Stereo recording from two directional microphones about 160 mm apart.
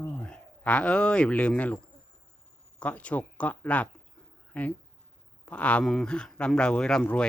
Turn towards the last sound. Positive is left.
turn(degrees=5)  # may be behind; listen again after turning